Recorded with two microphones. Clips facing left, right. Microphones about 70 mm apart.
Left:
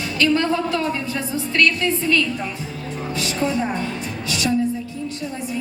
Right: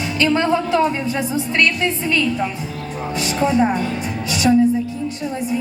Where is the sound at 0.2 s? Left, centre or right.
Right.